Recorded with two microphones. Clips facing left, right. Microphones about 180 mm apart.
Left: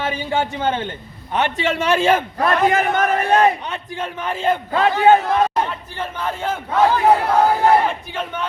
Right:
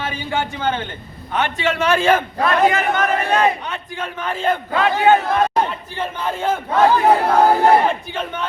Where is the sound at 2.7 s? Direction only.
50° left (ahead or behind).